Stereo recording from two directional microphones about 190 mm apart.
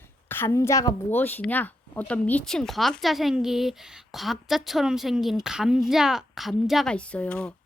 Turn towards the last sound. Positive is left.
turn(degrees=5)  # may be behind; listen again after turning